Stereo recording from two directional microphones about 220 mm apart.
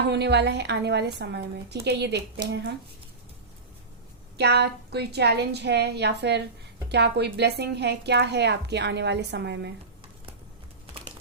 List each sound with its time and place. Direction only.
0.1 s speech: 50° right (ahead or behind)
4.4 s speech: 50° right (ahead or behind)